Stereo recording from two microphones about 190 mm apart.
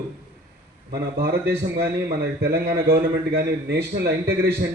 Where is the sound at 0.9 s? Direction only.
55° right (ahead or behind).